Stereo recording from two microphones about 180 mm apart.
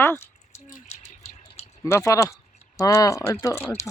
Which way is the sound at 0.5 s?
40° left (ahead or behind).